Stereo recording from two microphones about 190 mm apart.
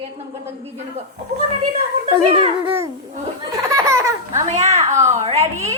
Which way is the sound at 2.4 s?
25° right (ahead or behind).